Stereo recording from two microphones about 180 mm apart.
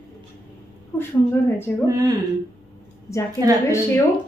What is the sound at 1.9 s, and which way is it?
Speech, 20° right (ahead or behind).